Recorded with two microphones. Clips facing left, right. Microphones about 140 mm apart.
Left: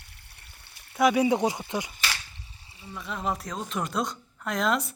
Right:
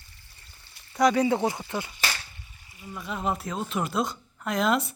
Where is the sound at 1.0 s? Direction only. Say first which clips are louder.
Even; 10° left (ahead or behind).